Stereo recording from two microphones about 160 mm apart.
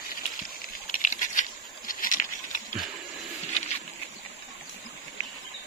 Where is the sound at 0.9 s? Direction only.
50° left (ahead or behind).